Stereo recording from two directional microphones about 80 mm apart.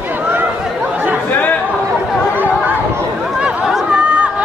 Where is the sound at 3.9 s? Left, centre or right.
Centre.